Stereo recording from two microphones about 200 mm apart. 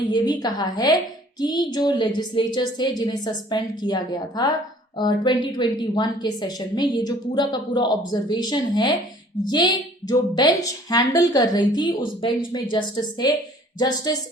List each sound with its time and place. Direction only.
0.1 s a woman's voice: 20° left (ahead or behind)